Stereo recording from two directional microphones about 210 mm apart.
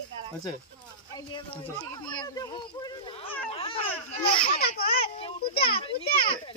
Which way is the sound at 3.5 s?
25° left (ahead or behind).